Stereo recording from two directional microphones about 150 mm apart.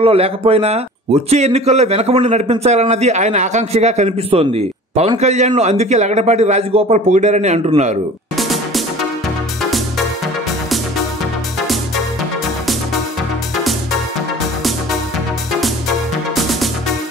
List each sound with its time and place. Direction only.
0.0 s a man's voice: 40° right (ahead or behind)
8.4 s music: centre (ahead or behind)